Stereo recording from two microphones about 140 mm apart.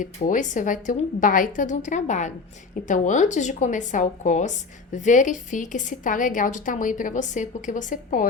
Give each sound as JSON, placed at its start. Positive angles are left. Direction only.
{"t": 0.0, "sound": "a woman's voice", "side_deg": 65}